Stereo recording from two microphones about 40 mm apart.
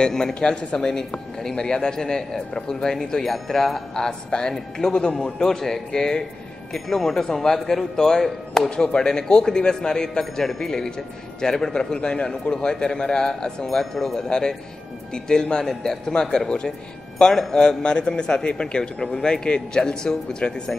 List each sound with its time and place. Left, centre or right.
0.0 s a man's voice: centre
14.2 s a man's voice: centre